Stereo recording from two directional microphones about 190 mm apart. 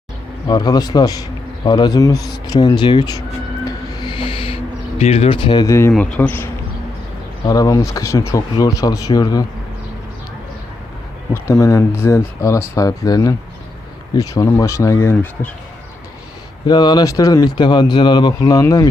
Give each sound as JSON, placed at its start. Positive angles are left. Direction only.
{"t": 0.4, "sound": "speech", "side_deg": 20}
{"t": 3.7, "sound": "music", "side_deg": 25}
{"t": 5.9, "sound": "speech", "side_deg": 5}
{"t": 11.4, "sound": "speech", "side_deg": 15}
{"t": 16.6, "sound": "speech", "side_deg": 20}